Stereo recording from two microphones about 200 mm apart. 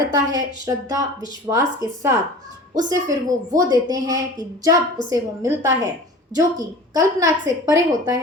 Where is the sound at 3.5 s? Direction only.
20° right (ahead or behind).